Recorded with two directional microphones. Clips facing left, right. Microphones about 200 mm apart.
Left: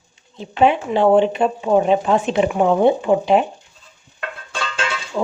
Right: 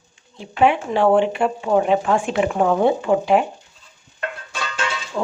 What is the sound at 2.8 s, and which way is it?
Speech, 20° left (ahead or behind).